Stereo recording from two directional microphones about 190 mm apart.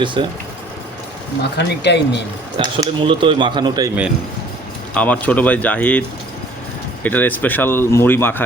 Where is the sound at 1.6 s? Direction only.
65° left (ahead or behind).